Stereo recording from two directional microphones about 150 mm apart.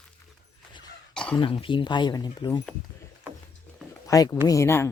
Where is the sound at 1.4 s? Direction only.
35° left (ahead or behind).